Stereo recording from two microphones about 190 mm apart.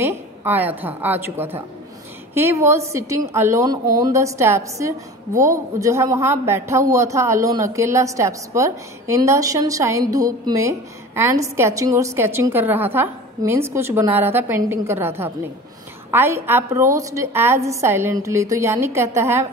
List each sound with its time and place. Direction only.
0.0 s a woman's voice: 15° right (ahead or behind)